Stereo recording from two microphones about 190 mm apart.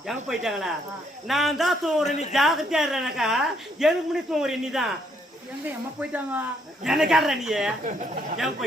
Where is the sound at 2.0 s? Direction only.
35° left (ahead or behind).